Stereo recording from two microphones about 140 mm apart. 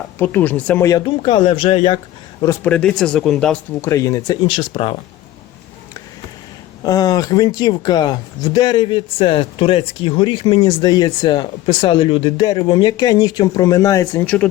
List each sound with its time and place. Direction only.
0.2 s speech: 15° left (ahead or behind)
0.9 s speech: 30° left (ahead or behind)
2.6 s speech: 5° left (ahead or behind)
3.8 s speech: 20° left (ahead or behind)
4.4 s speech: 40° left (ahead or behind)
6.8 s speech: 25° left (ahead or behind)